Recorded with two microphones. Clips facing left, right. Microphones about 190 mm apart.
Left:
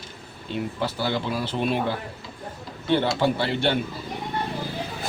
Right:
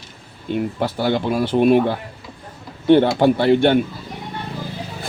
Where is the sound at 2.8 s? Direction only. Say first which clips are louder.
Right 9 dB; 55° right (ahead or behind).